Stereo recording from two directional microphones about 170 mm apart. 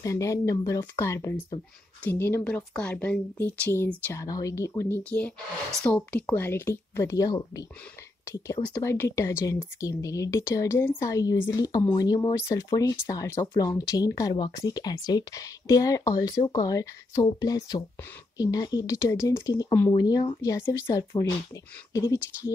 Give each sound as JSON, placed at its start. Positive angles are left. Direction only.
{"t": 0.0, "sound": "speech", "side_deg": 20}
{"t": 8.6, "sound": "speech", "side_deg": 15}